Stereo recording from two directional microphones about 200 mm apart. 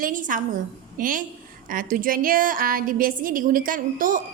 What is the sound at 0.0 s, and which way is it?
A woman's voice, 40° right (ahead or behind).